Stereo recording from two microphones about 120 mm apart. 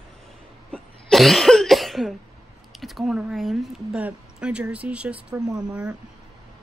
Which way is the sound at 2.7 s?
Centre (ahead or behind).